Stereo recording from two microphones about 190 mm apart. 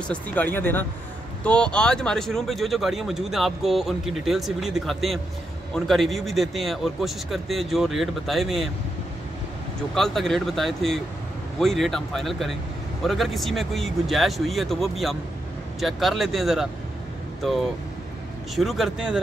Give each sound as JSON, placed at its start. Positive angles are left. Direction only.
{"t": 0.1, "sound": "speech", "side_deg": 10}
{"t": 9.9, "sound": "speech", "side_deg": 0}
{"t": 18.6, "sound": "speech", "side_deg": 0}